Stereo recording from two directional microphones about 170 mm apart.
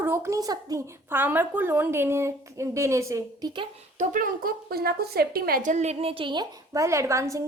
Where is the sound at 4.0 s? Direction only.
50° right (ahead or behind).